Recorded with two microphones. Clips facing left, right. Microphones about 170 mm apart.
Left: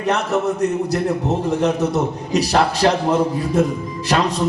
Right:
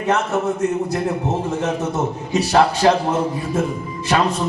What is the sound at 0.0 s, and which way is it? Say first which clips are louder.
A man's voice: even; 35° left (ahead or behind).